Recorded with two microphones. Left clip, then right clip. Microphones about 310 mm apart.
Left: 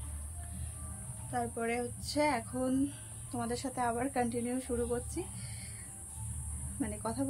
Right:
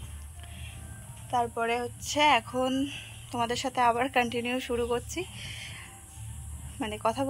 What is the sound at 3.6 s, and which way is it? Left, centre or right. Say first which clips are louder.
A woman's voice: right 10 dB; right.